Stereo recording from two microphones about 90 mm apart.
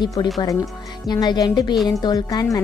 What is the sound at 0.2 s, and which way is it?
Speech, 55° left (ahead or behind).